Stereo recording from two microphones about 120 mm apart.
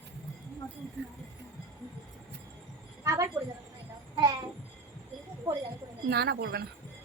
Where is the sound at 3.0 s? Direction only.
25° right (ahead or behind).